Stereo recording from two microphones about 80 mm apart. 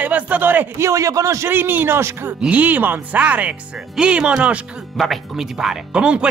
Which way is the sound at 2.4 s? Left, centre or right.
Centre.